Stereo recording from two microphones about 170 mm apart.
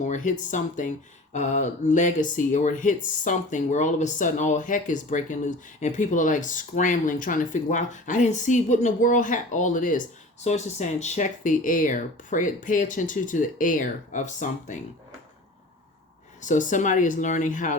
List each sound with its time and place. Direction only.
0.0 s speech: 45° left (ahead or behind)
16.4 s speech: 50° left (ahead or behind)